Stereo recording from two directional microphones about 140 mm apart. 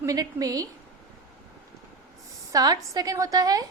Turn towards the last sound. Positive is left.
turn(degrees=-25)  # may be behind; listen again after turning